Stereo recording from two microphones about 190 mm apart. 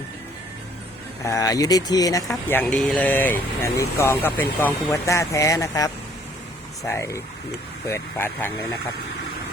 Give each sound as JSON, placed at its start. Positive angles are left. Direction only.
{"t": 1.2, "sound": "speech", "side_deg": 15}